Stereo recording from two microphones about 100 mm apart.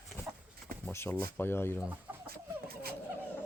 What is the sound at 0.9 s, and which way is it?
Speech, 25° left (ahead or behind).